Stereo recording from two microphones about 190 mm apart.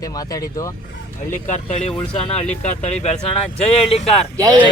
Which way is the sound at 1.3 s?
40° left (ahead or behind).